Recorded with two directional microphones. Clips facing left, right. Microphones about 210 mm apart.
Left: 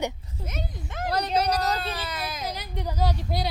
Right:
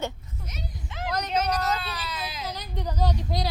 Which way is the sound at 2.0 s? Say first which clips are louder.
Left 2 dB; 50° left (ahead or behind).